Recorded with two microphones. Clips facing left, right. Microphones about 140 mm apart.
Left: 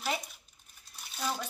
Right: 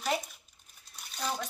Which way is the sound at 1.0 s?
Centre (ahead or behind).